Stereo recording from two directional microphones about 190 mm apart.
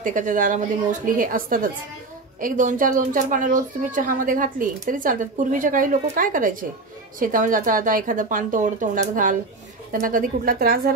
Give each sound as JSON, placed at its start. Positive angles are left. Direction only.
{"t": 0.0, "sound": "speech", "side_deg": -45}